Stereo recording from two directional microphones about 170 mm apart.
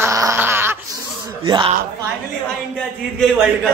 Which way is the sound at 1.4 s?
30° right (ahead or behind).